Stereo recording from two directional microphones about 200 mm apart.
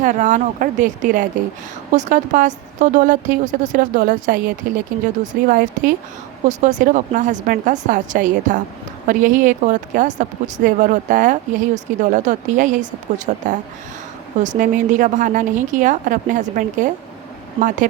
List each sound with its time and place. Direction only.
0.0 s speech: 40° right (ahead or behind)